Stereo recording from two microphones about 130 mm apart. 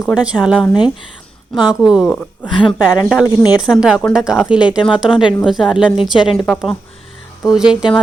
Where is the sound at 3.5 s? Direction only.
5° right (ahead or behind).